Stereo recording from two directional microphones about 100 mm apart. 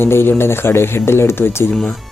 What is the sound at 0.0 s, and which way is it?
Speech, 25° left (ahead or behind).